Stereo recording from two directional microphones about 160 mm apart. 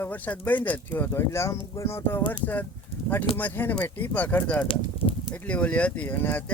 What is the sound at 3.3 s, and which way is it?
Speech, 10° left (ahead or behind).